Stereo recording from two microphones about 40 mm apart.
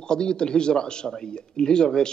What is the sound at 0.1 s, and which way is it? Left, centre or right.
Speech, left.